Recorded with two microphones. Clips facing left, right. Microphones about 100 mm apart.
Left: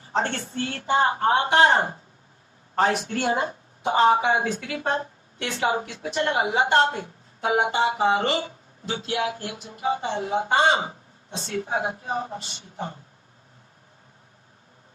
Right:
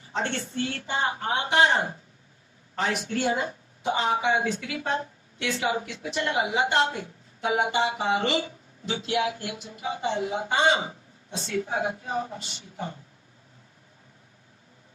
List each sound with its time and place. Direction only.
0.1 s a woman's voice: 40° left (ahead or behind)